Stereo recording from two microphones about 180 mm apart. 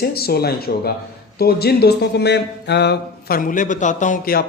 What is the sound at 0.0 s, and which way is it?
Speech, 60° left (ahead or behind).